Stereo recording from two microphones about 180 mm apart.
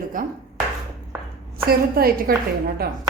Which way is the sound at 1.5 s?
55° right (ahead or behind).